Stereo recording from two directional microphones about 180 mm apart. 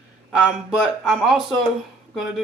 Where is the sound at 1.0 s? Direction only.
Centre (ahead or behind).